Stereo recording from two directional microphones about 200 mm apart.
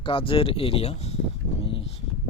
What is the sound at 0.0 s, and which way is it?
Speech, 25° left (ahead or behind).